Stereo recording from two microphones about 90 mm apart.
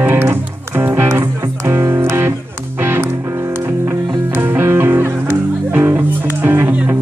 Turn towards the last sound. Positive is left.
turn(degrees=-25)  # may be behind; listen again after turning